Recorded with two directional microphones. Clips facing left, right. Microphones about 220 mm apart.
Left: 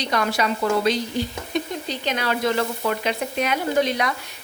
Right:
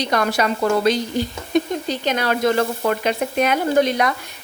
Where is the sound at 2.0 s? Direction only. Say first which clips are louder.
Right 4 dB; 45° right (ahead or behind).